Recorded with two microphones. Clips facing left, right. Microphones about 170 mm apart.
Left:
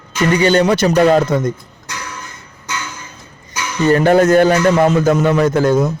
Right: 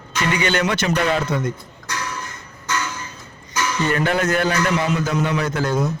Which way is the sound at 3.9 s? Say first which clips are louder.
Left 12 dB; 40° left (ahead or behind).